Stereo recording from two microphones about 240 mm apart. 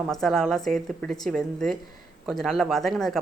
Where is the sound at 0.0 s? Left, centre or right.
Centre.